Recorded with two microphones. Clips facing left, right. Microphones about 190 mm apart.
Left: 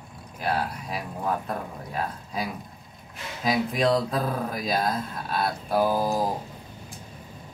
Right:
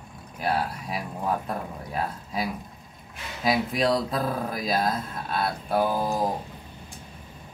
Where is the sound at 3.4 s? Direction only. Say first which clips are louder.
Even; 5° right (ahead or behind).